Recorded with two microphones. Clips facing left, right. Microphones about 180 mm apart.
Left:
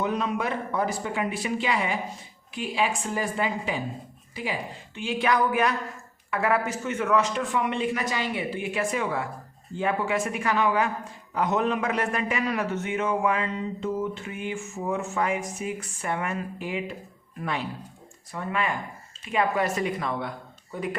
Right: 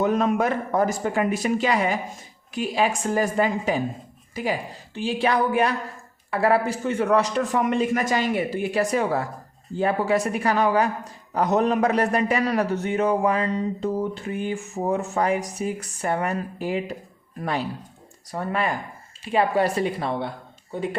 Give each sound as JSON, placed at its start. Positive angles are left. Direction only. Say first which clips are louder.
{"t": 0.0, "sound": "speech", "louder": "right 6 dB", "side_deg": -45}